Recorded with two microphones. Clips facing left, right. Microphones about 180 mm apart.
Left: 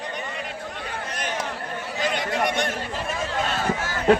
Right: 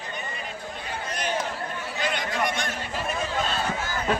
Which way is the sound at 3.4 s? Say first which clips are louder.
Left 3 dB; 75° left (ahead or behind).